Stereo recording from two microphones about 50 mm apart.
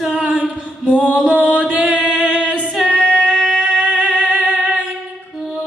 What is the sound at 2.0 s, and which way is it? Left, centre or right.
Music, right.